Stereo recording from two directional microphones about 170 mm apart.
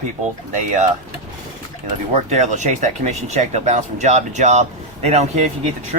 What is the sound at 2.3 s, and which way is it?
Speech, 45° right (ahead or behind).